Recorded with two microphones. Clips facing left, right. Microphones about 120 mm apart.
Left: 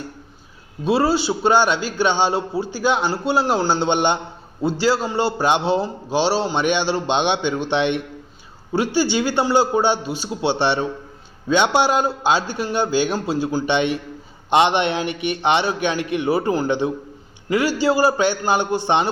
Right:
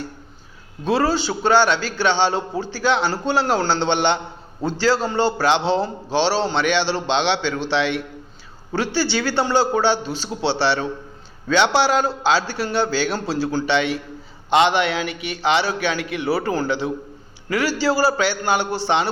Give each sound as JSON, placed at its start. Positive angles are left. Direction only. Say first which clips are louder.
{"t": 0.9, "sound": "a man's voice", "louder": "left 1 dB", "side_deg": 10}